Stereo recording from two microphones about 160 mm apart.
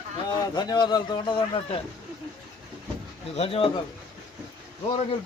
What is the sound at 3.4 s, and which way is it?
Speech, 35° left (ahead or behind).